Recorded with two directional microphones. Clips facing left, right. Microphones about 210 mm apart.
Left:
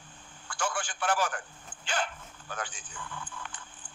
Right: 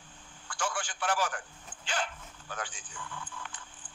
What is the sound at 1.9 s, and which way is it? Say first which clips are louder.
A man's voice: left 2 dB; 55° left (ahead or behind).